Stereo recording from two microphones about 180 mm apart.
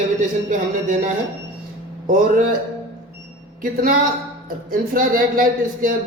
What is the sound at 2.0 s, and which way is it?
Speech, 45° right (ahead or behind).